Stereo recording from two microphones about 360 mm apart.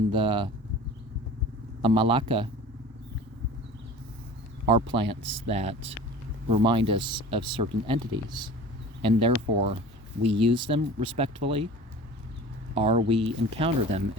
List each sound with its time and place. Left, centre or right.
0.1 s speech: centre
1.8 s speech: centre
4.6 s speech: centre
12.7 s speech: centre